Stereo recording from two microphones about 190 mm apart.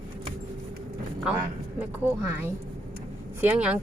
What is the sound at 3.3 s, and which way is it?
Speech, 10° right (ahead or behind).